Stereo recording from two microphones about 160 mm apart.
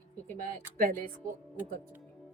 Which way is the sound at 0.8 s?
60° right (ahead or behind).